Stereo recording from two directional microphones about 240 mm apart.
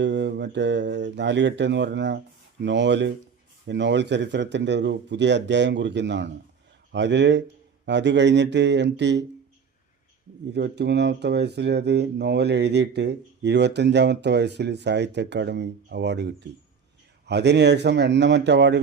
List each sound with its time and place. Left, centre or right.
0.0 s speech: right
10.5 s speech: right